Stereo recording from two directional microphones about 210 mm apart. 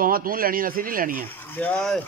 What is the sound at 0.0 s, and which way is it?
Speech, 45° right (ahead or behind).